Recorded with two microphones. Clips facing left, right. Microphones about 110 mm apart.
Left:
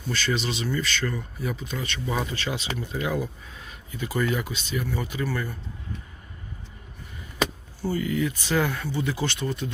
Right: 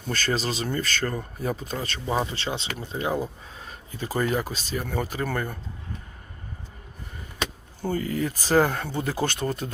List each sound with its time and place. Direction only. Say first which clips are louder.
0.1 s speech: right 1 dB; 45° right (ahead or behind)
7.8 s speech: even; 50° right (ahead or behind)
8.0 s speech: left 1 dB; 35° right (ahead or behind)